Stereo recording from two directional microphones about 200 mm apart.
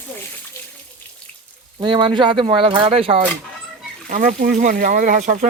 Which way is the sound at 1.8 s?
25° right (ahead or behind).